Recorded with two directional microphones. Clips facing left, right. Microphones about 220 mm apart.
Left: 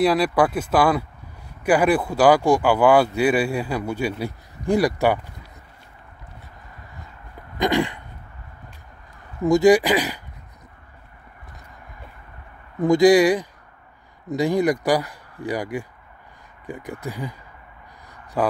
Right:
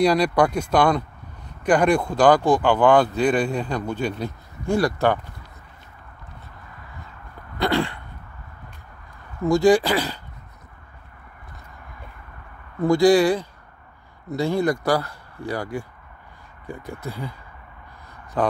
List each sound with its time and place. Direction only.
0.0 s speech: 5° left (ahead or behind)
7.5 s a sound: 15° left (ahead or behind)
9.4 s speech: 15° left (ahead or behind)
12.8 s speech: 15° left (ahead or behind)